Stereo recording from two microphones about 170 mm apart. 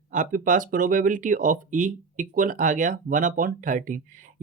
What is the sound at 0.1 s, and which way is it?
Speech, 50° right (ahead or behind).